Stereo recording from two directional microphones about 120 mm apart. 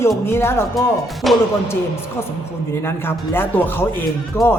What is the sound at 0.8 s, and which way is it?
Speech, centre (ahead or behind).